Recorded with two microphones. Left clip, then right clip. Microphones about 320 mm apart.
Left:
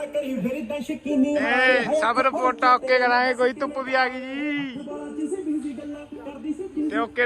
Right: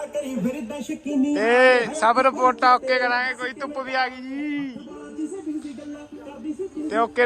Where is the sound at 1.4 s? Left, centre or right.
Centre.